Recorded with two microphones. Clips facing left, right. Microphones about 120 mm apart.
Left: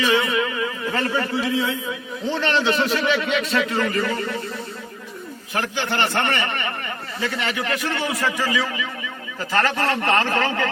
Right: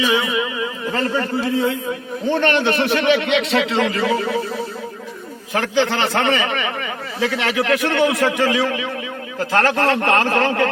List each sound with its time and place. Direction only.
0.2 s a sound: 15° right (ahead or behind)
1.2 s a man's voice: 45° right (ahead or behind); by 4.4 s 85° right
5.7 s a man's voice: 90° right; by 10.7 s 60° right (ahead or behind)